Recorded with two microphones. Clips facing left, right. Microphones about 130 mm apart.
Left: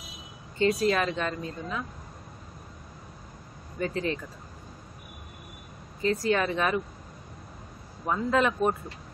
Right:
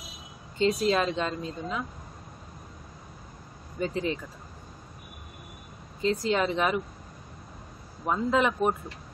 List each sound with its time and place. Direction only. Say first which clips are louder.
0.6 s a woman's voice: even; 25° right (ahead or behind)
3.8 s speech: even; 20° right (ahead or behind)
6.0 s a woman's voice: even; 20° right (ahead or behind)
8.1 s speech: even; 15° right (ahead or behind)